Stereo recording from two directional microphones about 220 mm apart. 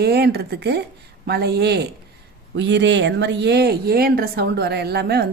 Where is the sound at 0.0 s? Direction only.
45° right (ahead or behind).